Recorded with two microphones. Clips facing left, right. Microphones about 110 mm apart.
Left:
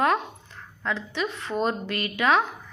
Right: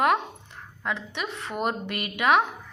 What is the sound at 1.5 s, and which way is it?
Speech, 15° right (ahead or behind).